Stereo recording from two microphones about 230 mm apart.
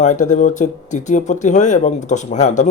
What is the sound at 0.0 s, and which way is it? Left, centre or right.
Speech, left.